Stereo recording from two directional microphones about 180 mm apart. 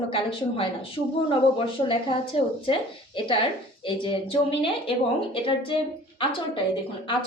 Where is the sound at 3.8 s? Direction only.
30° left (ahead or behind).